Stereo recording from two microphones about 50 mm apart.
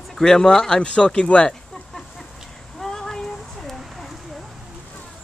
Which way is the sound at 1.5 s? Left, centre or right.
Centre.